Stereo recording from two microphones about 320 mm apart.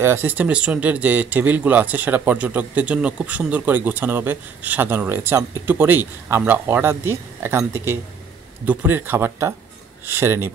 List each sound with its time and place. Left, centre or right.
0.0 s speech: centre